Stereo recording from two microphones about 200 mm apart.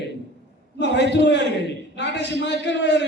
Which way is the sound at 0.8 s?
60° left (ahead or behind).